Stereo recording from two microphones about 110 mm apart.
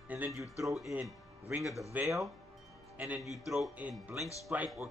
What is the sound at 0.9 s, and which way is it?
Speech, 15° right (ahead or behind).